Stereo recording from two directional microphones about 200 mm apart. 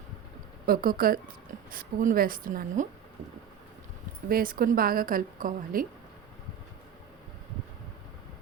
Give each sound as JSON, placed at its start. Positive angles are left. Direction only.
{"t": 0.6, "sound": "a woman's voice", "side_deg": -45}
{"t": 4.3, "sound": "a woman's voice", "side_deg": -45}